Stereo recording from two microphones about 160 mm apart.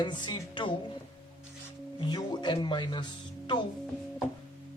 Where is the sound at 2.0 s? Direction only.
25° left (ahead or behind).